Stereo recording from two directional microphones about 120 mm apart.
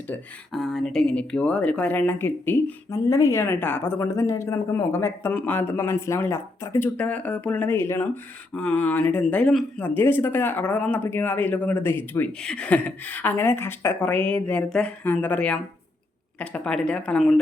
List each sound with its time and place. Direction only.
0.5 s speech: centre (ahead or behind)
9.8 s speech: 15° left (ahead or behind)